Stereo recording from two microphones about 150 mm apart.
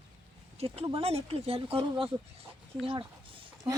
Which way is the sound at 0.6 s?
40° right (ahead or behind).